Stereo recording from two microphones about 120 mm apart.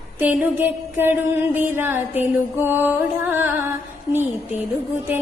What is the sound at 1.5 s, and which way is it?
Music, 20° right (ahead or behind).